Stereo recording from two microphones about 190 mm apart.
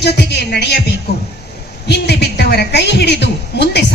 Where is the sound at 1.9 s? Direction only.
60° left (ahead or behind).